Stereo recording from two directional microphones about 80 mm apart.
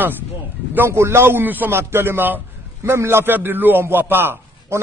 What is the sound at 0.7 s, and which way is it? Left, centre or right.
A man's voice, right.